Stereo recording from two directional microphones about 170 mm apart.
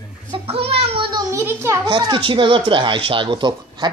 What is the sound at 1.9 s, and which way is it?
Speech, 30° right (ahead or behind).